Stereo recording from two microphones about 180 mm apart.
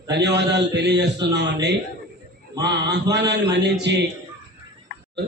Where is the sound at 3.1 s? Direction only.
70° right (ahead or behind).